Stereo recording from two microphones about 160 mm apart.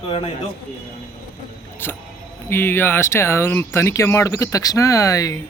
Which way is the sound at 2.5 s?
15° left (ahead or behind).